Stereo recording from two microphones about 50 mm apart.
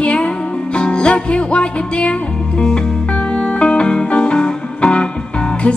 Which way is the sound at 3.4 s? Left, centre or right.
Centre.